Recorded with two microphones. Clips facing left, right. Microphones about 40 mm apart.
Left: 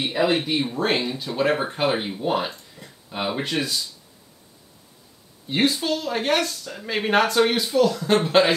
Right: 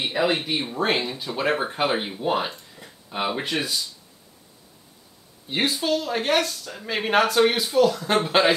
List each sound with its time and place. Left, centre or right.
0.0 s speech: centre
5.5 s speech: centre